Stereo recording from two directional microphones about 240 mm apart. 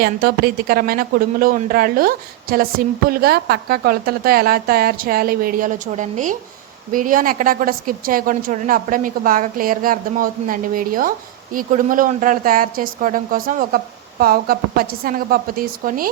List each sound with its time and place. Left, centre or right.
0.0 s a woman's voice: right